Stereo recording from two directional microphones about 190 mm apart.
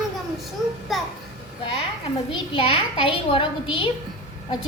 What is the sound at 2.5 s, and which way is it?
A woman's voice, 25° left (ahead or behind).